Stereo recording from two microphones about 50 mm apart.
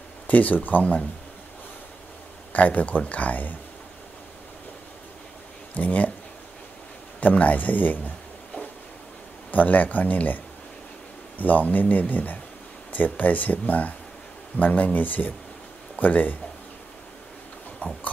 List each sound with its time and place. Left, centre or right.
0.3 s speech: left
2.5 s speech: left
5.8 s speech: left
7.2 s speech: left
9.5 s speech: left
17.8 s a sound: left